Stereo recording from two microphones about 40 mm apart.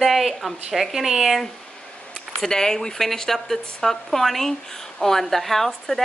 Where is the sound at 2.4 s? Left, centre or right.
Centre.